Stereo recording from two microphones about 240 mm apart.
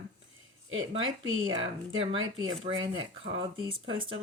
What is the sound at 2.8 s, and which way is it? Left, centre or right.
Speech, right.